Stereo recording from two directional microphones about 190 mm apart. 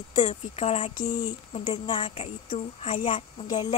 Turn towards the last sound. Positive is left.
turn(degrees=25)  # may be behind; listen again after turning